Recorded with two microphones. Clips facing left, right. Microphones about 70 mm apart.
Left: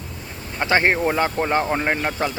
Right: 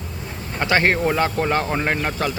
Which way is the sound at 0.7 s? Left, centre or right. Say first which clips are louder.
Even; left.